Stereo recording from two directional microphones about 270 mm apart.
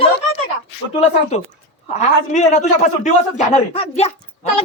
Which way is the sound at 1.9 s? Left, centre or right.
Left.